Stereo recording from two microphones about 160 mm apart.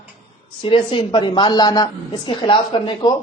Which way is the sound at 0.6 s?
35° left (ahead or behind).